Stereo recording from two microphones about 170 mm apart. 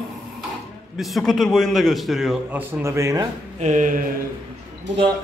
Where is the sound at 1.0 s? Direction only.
Centre (ahead or behind).